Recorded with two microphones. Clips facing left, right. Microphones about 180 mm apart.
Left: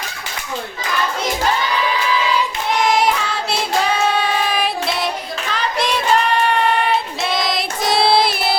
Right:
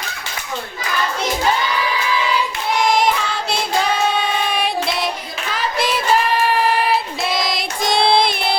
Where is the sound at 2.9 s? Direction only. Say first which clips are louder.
Even; 5° left (ahead or behind).